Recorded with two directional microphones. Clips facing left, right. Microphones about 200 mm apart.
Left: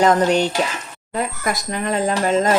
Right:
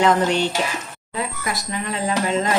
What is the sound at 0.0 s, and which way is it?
Speech, 45° left (ahead or behind).